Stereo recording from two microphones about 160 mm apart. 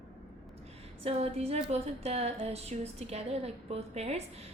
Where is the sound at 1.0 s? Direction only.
40° right (ahead or behind).